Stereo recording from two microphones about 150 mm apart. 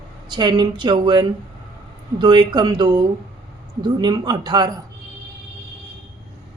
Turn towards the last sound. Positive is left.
turn(degrees=-25)  # may be behind; listen again after turning